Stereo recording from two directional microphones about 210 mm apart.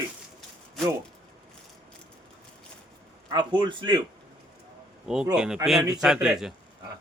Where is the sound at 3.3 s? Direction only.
20° right (ahead or behind).